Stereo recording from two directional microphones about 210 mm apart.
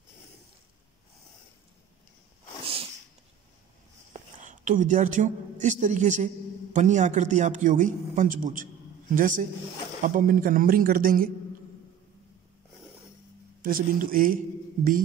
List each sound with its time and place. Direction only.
4.4 s a man's voice: 35° right (ahead or behind)
13.6 s a man's voice: 40° right (ahead or behind)